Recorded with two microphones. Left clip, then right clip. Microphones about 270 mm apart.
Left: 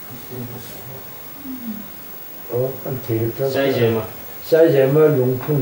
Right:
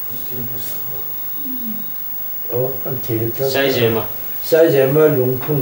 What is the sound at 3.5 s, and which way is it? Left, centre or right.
Speech, centre.